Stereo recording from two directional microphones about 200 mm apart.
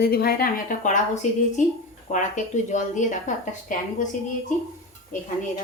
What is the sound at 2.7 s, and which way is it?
A woman's voice, 40° left (ahead or behind).